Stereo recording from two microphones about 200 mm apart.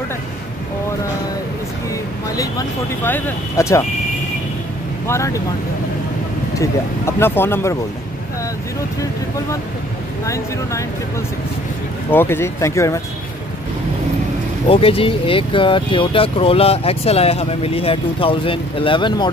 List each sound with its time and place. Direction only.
2.3 s speech: 15° left (ahead or behind)
5.0 s speech: 15° left (ahead or behind)
6.6 s speech: 15° left (ahead or behind)
10.2 s speech: 15° left (ahead or behind)
12.1 s speech: 10° left (ahead or behind)
14.7 s speech: 30° left (ahead or behind)